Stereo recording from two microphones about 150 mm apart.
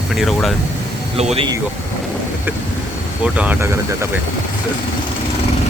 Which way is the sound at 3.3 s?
10° right (ahead or behind).